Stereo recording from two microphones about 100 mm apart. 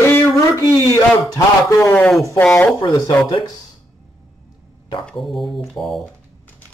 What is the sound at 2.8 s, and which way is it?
Speech, 45° left (ahead or behind).